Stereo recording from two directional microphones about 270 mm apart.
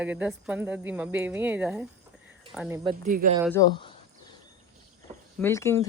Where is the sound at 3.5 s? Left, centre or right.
Centre.